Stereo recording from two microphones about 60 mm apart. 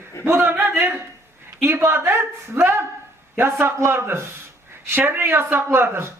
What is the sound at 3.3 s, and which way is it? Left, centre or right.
A man's voice, right.